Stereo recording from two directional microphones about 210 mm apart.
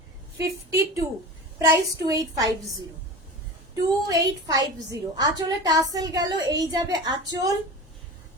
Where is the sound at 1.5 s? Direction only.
15° right (ahead or behind).